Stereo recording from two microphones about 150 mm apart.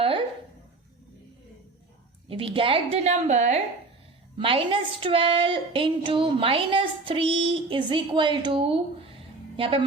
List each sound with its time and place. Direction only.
2.3 s a woman's voice: 35° right (ahead or behind)
4.4 s a woman's voice: 35° right (ahead or behind)